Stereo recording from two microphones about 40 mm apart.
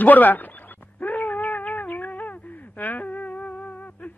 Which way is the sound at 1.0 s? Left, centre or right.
Left.